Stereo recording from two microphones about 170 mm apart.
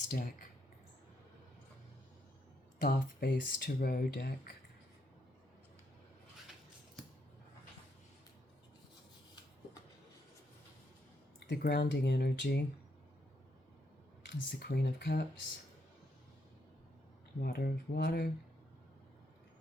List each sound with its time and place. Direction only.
0.1 s speech: 55° left (ahead or behind)
2.8 s speech: 65° left (ahead or behind)
11.3 s speech: 85° left
14.3 s speech: 70° left (ahead or behind)
17.4 s speech: 65° left (ahead or behind)